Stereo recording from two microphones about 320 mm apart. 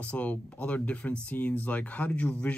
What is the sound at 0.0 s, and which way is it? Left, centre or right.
Speech, centre.